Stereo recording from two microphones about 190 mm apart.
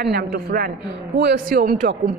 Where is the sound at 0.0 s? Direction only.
55° right (ahead or behind).